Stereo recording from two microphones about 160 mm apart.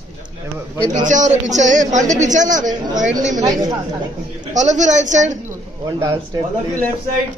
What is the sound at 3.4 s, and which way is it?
Speech, 25° right (ahead or behind).